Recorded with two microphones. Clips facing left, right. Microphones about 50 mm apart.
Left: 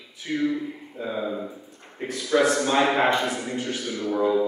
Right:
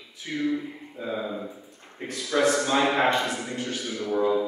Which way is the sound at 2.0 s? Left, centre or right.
Centre.